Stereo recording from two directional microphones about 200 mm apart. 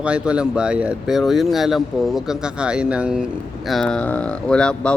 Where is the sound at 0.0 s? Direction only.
5° right (ahead or behind).